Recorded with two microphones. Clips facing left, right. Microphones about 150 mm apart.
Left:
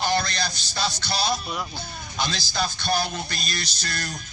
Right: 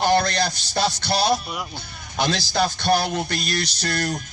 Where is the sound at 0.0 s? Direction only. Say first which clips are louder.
Right 6 dB; 55° right (ahead or behind).